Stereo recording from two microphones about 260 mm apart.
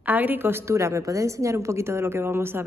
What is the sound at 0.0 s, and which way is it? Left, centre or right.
A woman's voice, centre.